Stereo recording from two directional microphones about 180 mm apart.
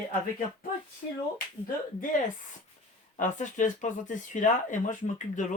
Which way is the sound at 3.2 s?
45° left (ahead or behind).